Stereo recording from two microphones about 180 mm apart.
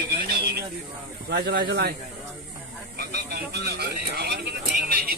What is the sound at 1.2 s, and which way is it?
Speech, 60° right (ahead or behind).